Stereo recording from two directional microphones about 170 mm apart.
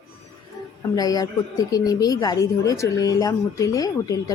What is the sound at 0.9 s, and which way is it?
A woman's voice, 20° left (ahead or behind).